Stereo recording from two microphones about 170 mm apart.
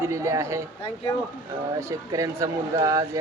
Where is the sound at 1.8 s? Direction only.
20° right (ahead or behind).